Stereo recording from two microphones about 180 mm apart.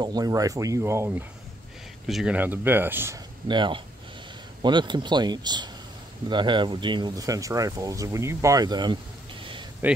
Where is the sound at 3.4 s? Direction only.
25° right (ahead or behind).